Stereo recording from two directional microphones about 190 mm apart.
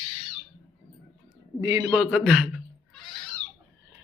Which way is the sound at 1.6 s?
15° right (ahead or behind).